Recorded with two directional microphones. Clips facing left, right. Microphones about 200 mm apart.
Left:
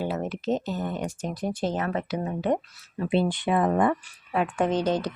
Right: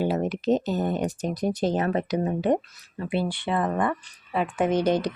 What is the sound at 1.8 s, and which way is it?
Speech, 35° right (ahead or behind).